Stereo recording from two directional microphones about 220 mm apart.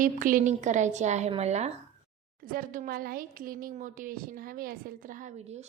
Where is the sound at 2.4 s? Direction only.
40° right (ahead or behind).